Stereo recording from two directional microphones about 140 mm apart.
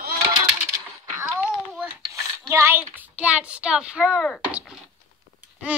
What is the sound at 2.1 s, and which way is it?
Dishes, 20° right (ahead or behind).